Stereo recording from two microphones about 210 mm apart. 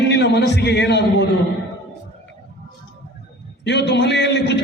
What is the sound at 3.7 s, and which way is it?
Speech, 55° left (ahead or behind).